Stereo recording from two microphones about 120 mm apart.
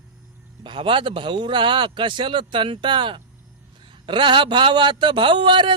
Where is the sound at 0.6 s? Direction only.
45° right (ahead or behind).